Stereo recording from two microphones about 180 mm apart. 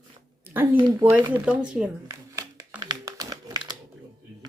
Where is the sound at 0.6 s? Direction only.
10° right (ahead or behind).